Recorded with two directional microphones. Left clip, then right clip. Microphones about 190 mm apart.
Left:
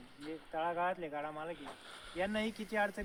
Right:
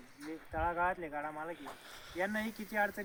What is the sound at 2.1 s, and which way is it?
Speech, 20° left (ahead or behind).